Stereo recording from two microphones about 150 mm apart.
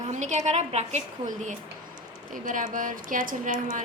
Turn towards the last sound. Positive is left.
turn(degrees=-60)  # may be behind; listen again after turning